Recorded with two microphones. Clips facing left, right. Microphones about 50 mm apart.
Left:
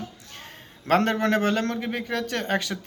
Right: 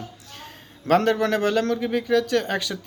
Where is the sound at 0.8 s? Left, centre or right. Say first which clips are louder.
Right 2 dB; left.